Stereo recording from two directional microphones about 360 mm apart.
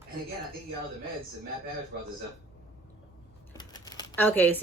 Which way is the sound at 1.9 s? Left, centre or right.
Right.